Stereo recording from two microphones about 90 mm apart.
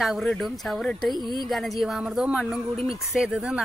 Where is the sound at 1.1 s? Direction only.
55° right (ahead or behind).